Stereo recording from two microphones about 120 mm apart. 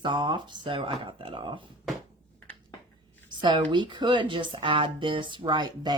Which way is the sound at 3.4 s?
40° right (ahead or behind).